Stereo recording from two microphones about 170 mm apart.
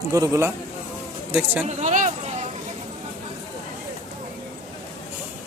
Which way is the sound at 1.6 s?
45° right (ahead or behind).